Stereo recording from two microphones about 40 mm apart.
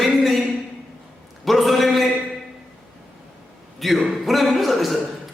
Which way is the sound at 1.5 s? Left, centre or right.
Centre.